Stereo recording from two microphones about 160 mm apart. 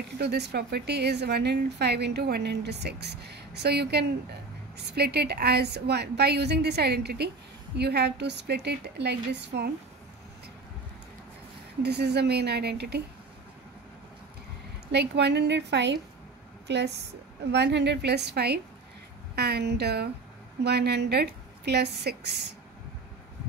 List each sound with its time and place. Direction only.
0.2 s speech: 90° right
11.8 s speech: 90° right
14.9 s speech: 90° right